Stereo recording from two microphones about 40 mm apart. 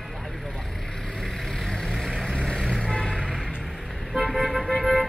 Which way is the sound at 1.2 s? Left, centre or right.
Centre.